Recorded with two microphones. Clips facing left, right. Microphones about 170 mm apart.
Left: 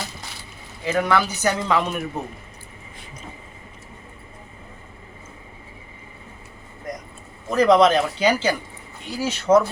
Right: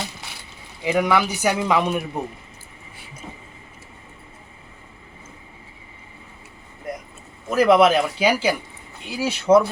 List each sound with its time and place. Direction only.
0.8 s speech: 15° right (ahead or behind)
6.9 s vehicle: 10° right (ahead or behind)
7.5 s speech: 5° right (ahead or behind)